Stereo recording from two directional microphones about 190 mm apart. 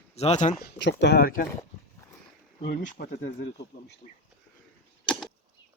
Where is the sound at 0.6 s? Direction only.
60° left (ahead or behind).